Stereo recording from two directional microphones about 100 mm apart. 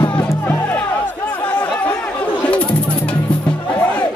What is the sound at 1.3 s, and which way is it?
Music, 15° left (ahead or behind).